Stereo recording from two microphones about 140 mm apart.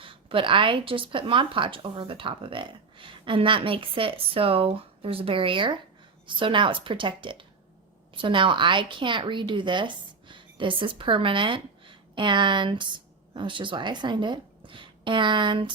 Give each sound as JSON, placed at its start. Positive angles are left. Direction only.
{"t": 0.0, "sound": "a woman's voice", "side_deg": -40}